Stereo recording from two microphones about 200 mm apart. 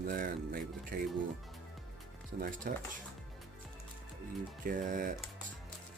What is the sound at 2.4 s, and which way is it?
Speech, 40° right (ahead or behind).